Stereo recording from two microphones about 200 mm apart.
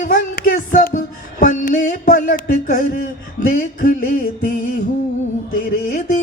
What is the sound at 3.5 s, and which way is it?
Music, 45° left (ahead or behind).